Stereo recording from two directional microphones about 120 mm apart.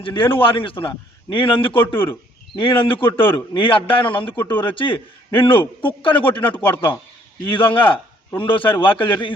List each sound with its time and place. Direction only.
0.0 s a man's voice: 45° left (ahead or behind)
6.5 s speech: 15° left (ahead or behind)
7.5 s a man's voice: 45° left (ahead or behind)